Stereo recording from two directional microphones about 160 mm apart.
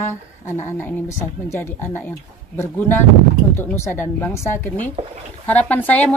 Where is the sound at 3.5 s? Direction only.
15° left (ahead or behind).